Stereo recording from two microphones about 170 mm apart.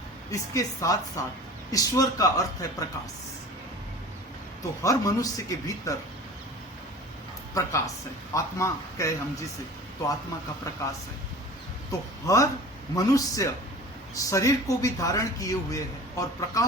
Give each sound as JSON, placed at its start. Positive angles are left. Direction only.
{"t": 0.3, "sound": "a man's voice", "side_deg": 20}
{"t": 4.8, "sound": "a man's voice", "side_deg": 20}
{"t": 7.6, "sound": "a man's voice", "side_deg": 20}
{"t": 11.9, "sound": "a man's voice", "side_deg": 20}